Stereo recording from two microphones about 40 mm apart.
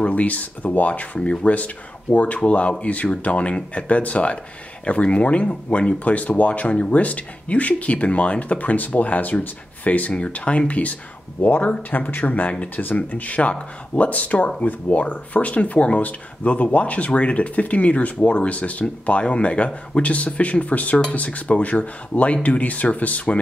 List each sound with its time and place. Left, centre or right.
0.1 s speech: left
10.3 s speech: left